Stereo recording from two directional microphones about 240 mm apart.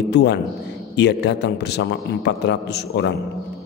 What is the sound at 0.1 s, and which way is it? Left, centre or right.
A man's voice, left.